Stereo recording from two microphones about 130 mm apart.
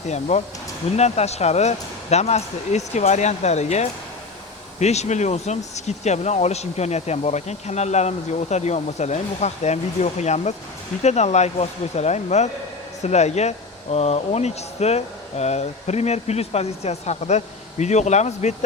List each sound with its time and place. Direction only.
0.1 s speech: 60° left (ahead or behind)